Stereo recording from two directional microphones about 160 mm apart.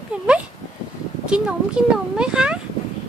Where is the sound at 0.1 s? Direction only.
5° right (ahead or behind).